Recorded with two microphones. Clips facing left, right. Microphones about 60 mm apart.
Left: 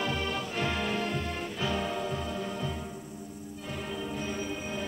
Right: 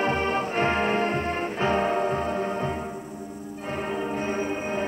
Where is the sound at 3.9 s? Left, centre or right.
Right.